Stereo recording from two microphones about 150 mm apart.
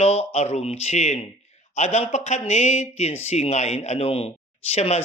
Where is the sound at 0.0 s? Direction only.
45° left (ahead or behind).